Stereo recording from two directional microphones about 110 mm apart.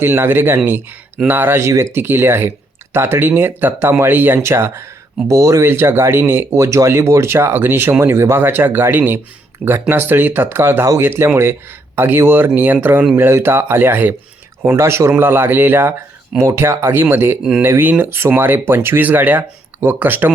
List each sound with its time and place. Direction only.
0.0 s speech: 20° right (ahead or behind)